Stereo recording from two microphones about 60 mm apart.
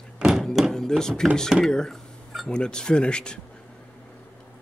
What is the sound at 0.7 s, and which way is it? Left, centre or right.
Speech, centre.